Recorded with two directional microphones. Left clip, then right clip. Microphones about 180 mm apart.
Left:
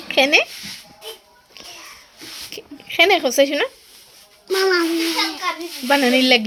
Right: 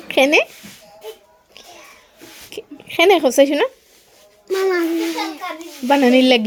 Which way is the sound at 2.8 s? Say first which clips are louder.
Right 2 dB; 35° right (ahead or behind).